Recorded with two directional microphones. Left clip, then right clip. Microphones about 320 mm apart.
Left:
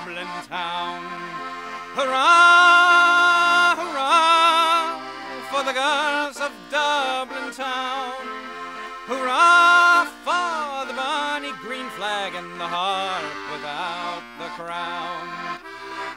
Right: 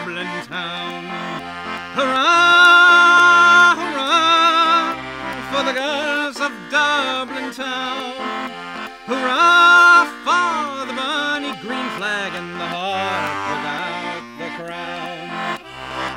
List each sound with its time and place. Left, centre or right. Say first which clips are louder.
2.0 s music: right 1 dB; right
9.1 s music: right 2 dB; right